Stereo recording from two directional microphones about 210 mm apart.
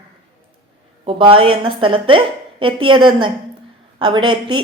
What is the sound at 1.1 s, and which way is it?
A woman's voice, 25° right (ahead or behind).